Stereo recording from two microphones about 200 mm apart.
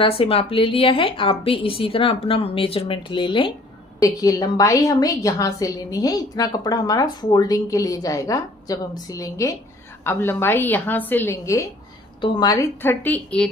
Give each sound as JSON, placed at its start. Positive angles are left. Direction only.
{"t": 0.0, "sound": "a woman's voice", "side_deg": 30}